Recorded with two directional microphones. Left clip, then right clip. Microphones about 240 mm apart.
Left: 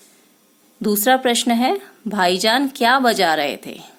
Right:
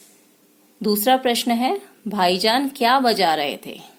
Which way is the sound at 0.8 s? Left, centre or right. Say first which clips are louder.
Left 2 dB; centre.